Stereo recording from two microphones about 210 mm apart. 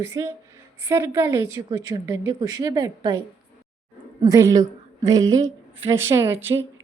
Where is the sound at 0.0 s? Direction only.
15° right (ahead or behind).